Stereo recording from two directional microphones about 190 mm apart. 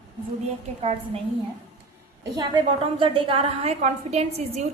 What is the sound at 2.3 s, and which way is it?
A woman's voice, 20° right (ahead or behind).